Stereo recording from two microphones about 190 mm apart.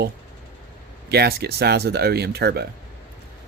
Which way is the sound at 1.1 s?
60° right (ahead or behind).